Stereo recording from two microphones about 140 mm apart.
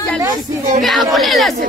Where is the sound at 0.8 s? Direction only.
Centre (ahead or behind).